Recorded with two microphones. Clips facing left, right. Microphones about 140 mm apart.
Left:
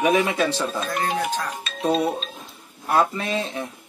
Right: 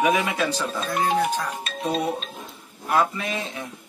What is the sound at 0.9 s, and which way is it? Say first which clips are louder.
Speech: right 6 dB; 10° right (ahead or behind).